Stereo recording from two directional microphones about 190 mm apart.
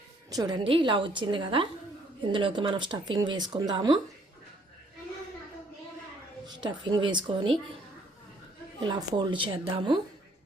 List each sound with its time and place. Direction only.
0.3 s speech: 20° right (ahead or behind)
6.4 s speech: 25° right (ahead or behind)
8.8 s speech: 25° right (ahead or behind)